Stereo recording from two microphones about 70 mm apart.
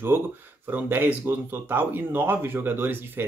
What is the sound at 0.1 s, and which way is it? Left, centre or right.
Speech, right.